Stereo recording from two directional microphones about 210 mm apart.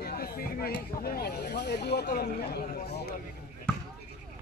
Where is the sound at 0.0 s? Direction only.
45° left (ahead or behind).